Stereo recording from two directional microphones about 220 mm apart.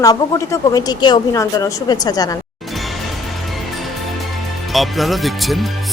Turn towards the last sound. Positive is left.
turn(degrees=0)  # may be behind; listen again after turning